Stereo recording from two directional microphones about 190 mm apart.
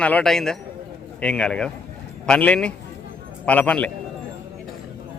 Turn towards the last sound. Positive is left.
turn(degrees=5)  # may be behind; listen again after turning